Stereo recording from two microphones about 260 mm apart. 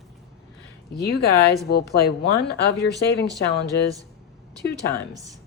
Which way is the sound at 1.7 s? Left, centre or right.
Left.